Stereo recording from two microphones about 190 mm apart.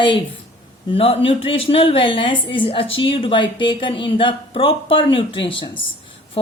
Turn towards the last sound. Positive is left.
turn(degrees=25)  # may be behind; listen again after turning